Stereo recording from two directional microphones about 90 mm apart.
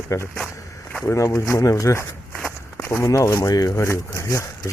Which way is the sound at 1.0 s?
35° left (ahead or behind).